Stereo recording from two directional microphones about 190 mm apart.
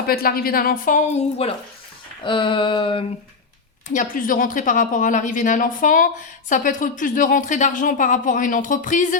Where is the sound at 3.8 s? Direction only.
40° left (ahead or behind).